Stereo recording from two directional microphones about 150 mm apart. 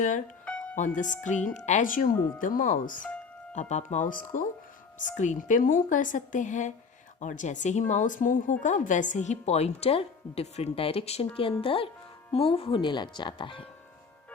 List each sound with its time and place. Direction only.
0.4 s music: 10° left (ahead or behind)
0.8 s speech: 55° left (ahead or behind)
3.5 s a woman's voice: 50° left (ahead or behind); by 13.7 s 35° left (ahead or behind)